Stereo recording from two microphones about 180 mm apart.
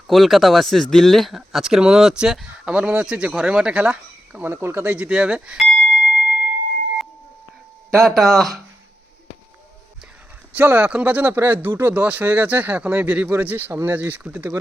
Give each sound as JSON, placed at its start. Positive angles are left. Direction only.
{"t": 0.1, "sound": "speech", "side_deg": 0}
{"t": 5.9, "sound": "bell", "side_deg": -50}
{"t": 7.9, "sound": "speech", "side_deg": 0}
{"t": 10.5, "sound": "speech", "side_deg": -10}